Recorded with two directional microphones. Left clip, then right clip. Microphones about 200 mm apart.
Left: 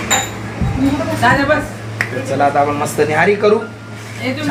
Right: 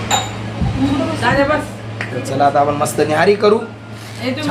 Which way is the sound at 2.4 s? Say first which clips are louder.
Right 1 dB; 10° right (ahead or behind).